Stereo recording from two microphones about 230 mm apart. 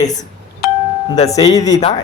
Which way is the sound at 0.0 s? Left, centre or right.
Centre.